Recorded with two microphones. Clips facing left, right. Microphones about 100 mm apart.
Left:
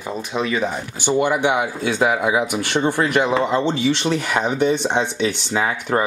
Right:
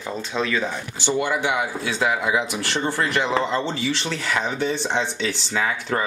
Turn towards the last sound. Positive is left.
turn(degrees=20)  # may be behind; listen again after turning